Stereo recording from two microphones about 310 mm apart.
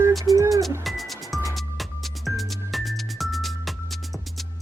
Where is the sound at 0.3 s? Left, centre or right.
Centre.